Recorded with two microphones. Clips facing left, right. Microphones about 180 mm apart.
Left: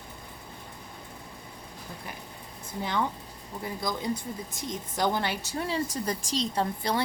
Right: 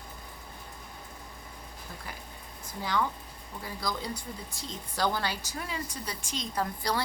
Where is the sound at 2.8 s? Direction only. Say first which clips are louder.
Left 1 dB; 20° left (ahead or behind).